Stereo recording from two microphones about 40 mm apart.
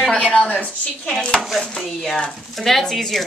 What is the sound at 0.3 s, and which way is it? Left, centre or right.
Speech, left.